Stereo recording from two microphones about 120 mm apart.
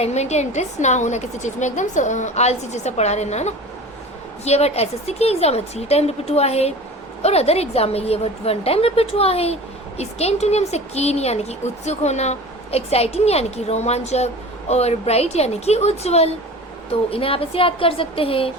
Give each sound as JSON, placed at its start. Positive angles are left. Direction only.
{"t": 0.0, "sound": "a woman's voice", "side_deg": 65}